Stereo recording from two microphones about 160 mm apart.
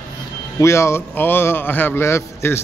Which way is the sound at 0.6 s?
15° left (ahead or behind).